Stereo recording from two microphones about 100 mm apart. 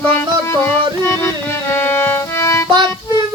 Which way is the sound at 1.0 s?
25° left (ahead or behind).